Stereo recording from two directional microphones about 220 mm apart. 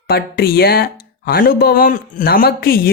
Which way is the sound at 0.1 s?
45° left (ahead or behind).